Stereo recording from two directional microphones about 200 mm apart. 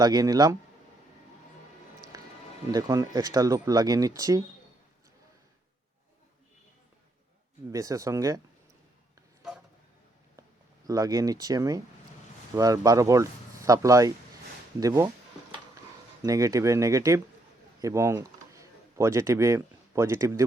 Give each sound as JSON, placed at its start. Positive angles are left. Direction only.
{"t": 0.0, "sound": "speech", "side_deg": -20}
{"t": 2.7, "sound": "speech", "side_deg": -20}
{"t": 7.7, "sound": "speech", "side_deg": -15}
{"t": 10.8, "sound": "speech", "side_deg": -20}
{"t": 16.2, "sound": "speech", "side_deg": -15}